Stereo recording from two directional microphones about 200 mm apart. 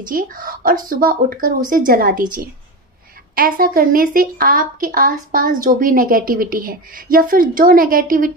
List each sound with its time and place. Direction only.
0.1 s a woman's voice: 45° right (ahead or behind)